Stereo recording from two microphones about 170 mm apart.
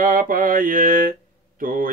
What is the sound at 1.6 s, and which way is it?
Mantra, 55° right (ahead or behind).